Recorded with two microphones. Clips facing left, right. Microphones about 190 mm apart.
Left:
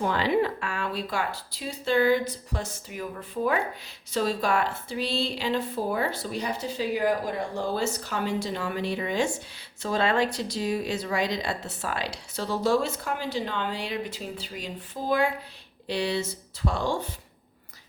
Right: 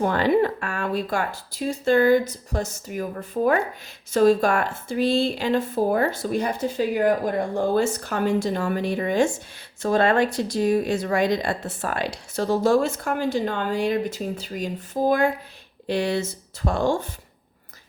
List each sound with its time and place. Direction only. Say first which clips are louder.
0.0 s speech: right 5 dB; 50° right (ahead or behind)